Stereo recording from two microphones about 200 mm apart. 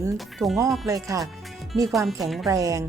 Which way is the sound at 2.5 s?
15° right (ahead or behind).